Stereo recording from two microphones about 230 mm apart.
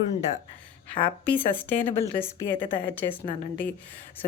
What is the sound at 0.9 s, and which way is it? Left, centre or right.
Speech, centre.